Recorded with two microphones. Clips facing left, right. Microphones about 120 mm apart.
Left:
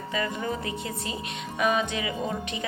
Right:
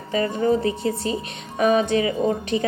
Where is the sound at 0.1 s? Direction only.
35° right (ahead or behind).